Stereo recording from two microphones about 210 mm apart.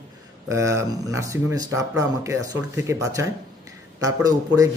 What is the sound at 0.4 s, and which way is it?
Speech, 15° right (ahead or behind).